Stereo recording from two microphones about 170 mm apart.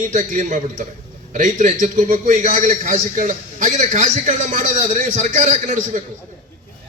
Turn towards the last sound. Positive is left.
turn(degrees=-45)  # may be behind; listen again after turning